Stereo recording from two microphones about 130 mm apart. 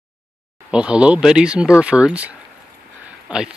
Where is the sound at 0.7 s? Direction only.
10° right (ahead or behind).